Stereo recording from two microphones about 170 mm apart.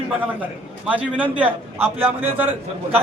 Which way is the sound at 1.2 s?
10° right (ahead or behind).